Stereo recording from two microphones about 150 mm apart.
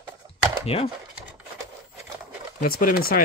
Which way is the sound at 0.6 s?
40° left (ahead or behind).